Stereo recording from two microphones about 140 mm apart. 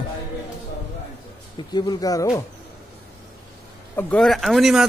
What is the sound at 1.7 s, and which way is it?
Speech, 30° left (ahead or behind).